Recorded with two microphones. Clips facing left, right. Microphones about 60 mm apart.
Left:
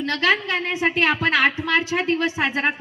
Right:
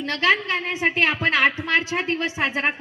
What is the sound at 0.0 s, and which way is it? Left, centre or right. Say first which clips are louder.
Speech: even; right.